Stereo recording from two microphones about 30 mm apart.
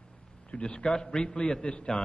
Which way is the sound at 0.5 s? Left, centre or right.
Left.